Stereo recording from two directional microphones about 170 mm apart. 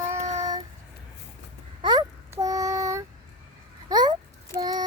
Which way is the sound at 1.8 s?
25° right (ahead or behind).